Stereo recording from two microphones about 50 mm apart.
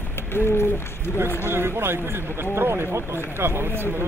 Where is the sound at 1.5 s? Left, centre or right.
Right.